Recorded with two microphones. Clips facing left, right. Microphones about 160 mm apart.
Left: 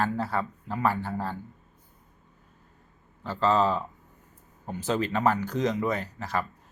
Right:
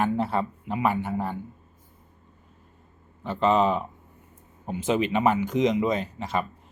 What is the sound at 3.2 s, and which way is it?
Speech, 20° right (ahead or behind).